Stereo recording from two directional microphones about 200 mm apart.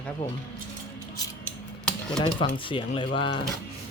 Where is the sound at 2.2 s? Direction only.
25° left (ahead or behind).